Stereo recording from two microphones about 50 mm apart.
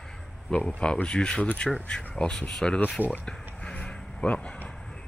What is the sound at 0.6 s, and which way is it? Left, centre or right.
Speech, centre.